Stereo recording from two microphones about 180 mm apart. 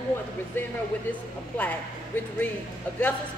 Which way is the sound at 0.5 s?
10° left (ahead or behind).